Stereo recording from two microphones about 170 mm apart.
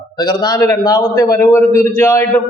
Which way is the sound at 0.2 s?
25° left (ahead or behind).